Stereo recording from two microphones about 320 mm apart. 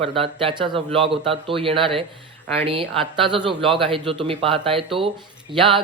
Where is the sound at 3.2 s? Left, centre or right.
Centre.